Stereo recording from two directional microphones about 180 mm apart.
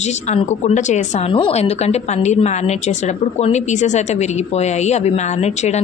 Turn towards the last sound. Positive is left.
turn(degrees=40)  # may be behind; listen again after turning